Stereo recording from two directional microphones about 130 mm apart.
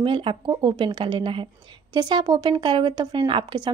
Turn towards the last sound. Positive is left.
turn(degrees=-35)  # may be behind; listen again after turning